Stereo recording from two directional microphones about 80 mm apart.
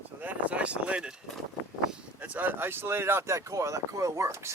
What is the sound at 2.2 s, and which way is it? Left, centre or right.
Speech, right.